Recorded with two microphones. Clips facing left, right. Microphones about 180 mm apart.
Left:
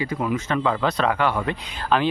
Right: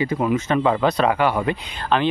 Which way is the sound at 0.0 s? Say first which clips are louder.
Right 4 dB; 25° right (ahead or behind).